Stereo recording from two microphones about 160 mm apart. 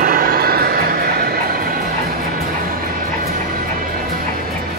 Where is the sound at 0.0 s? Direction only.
65° right (ahead or behind).